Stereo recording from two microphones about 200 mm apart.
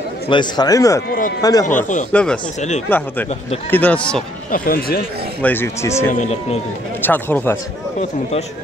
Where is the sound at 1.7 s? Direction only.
40° left (ahead or behind).